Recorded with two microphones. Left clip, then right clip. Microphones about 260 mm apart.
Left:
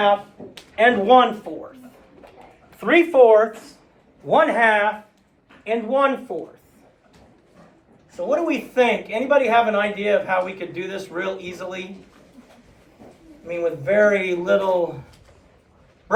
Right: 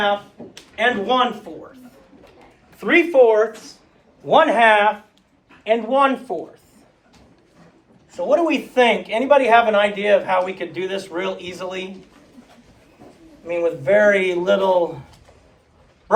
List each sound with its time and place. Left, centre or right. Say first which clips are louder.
0.4 s a sound: even; centre
0.8 s speech: left 4 dB; left
2.7 s speech: right 1 dB; centre
4.3 s a man's voice: right 3 dB; centre
5.6 s speech: right 3 dB; right
8.3 s speech: right 4 dB; right
13.5 s speech: right 4 dB; right